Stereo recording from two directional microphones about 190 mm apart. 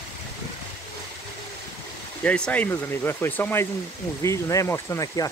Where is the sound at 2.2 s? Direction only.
5° left (ahead or behind).